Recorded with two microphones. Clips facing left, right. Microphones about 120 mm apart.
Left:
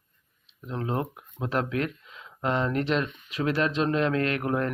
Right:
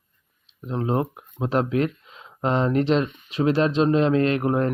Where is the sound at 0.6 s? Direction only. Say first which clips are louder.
Right 6 dB; 25° right (ahead or behind).